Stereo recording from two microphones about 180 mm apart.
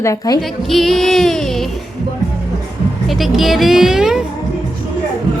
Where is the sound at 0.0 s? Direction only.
15° left (ahead or behind).